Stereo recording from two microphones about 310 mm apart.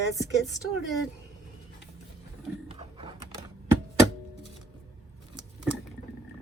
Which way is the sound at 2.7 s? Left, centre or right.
Centre.